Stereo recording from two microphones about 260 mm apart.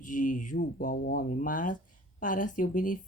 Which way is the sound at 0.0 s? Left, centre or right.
Left.